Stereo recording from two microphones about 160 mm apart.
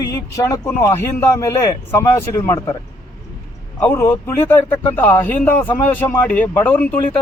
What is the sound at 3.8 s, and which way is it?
Speech, 15° left (ahead or behind).